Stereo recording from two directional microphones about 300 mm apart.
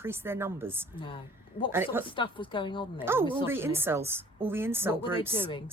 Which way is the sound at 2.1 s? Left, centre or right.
Centre.